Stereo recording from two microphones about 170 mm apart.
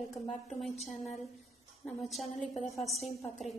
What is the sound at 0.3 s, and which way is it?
Speech, centre (ahead or behind).